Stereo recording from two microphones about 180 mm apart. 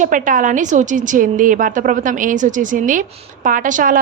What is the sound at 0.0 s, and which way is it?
A woman's voice, 45° right (ahead or behind).